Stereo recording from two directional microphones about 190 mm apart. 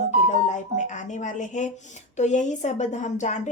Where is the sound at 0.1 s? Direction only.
40° left (ahead or behind).